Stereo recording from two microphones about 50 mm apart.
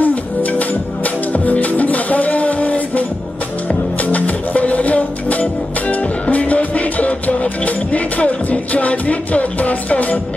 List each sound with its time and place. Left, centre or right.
0.0 s music: left